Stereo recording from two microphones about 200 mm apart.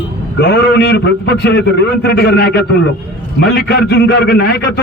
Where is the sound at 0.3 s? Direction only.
55° left (ahead or behind).